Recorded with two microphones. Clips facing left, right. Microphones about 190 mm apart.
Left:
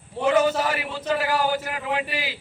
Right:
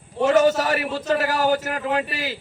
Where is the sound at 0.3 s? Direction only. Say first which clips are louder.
Right 3 dB; 45° right (ahead or behind).